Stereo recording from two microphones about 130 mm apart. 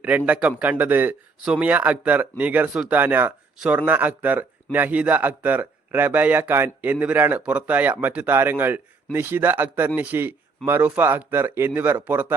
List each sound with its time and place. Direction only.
0.3 s a man's voice: 10° right (ahead or behind)